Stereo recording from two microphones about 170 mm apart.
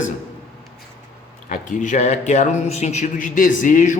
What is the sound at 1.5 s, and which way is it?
A man's voice, 50° left (ahead or behind).